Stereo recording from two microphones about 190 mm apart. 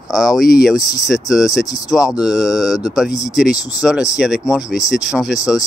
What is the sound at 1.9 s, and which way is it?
Speech, 5° right (ahead or behind).